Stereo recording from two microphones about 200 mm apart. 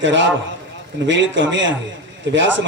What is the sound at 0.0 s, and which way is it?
Speech, 65° right (ahead or behind).